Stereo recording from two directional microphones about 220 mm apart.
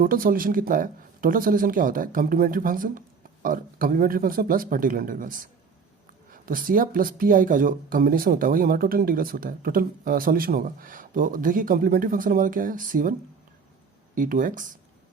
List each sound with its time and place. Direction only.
0.0 s speech: 40° right (ahead or behind)
14.2 s speech: 35° right (ahead or behind)